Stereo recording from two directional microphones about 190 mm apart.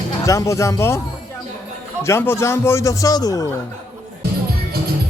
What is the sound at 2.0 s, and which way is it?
A man's voice, 15° left (ahead or behind).